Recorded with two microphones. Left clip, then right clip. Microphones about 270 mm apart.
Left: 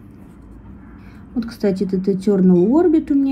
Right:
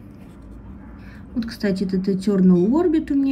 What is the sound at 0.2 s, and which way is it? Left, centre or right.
Vehicle, centre.